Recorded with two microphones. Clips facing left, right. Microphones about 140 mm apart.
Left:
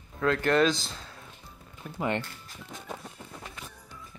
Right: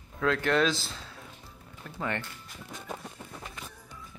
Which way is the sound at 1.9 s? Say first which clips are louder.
Left 4 dB; 20° left (ahead or behind).